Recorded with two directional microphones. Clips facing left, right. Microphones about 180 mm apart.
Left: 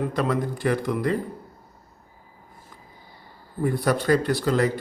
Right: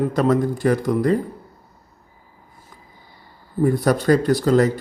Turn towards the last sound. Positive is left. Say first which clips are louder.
# right 6 dB
turn(degrees=-40)  # may be behind; listen again after turning